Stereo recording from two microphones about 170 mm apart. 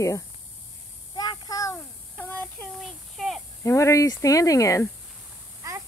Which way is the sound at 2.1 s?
10° left (ahead or behind).